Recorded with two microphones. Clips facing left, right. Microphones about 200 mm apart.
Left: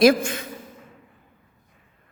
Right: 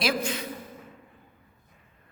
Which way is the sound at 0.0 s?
45° left (ahead or behind).